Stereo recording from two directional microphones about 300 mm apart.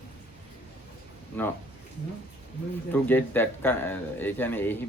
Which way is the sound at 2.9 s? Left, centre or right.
Centre.